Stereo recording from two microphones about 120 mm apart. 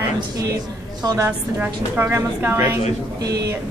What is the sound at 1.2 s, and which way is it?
A woman's voice, 15° right (ahead or behind).